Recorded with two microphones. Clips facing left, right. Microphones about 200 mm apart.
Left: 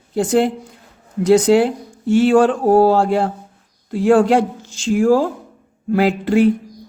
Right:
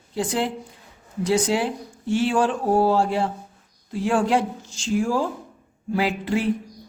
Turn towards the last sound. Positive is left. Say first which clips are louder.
# left 9 dB
turn(degrees=60)  # may be behind; listen again after turning